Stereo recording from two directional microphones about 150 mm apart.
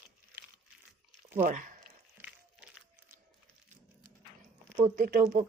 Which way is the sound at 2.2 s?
10° right (ahead or behind).